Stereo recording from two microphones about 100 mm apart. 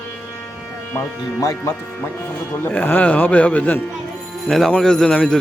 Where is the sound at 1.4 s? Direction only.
35° left (ahead or behind).